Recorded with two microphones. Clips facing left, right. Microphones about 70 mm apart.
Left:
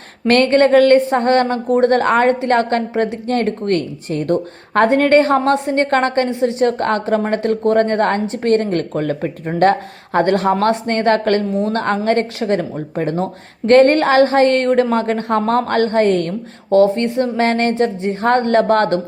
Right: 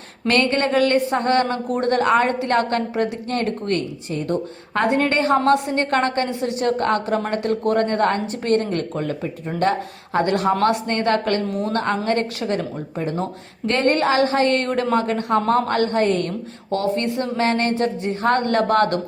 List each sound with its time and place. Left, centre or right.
0.3 s speech: left
4.1 s speech: left
11.5 s a woman's voice: left
11.8 s a woman's voice: left
15.7 s a woman's voice: left